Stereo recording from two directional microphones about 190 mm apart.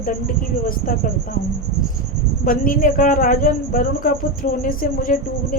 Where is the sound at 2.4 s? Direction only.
45° left (ahead or behind).